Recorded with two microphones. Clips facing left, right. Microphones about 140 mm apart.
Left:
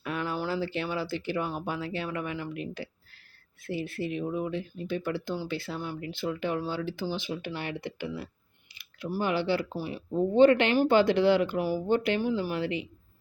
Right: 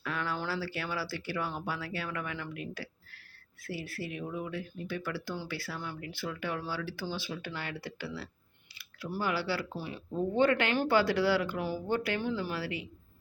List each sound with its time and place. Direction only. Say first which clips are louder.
0.0 s speech: left 4 dB; 20° left (ahead or behind)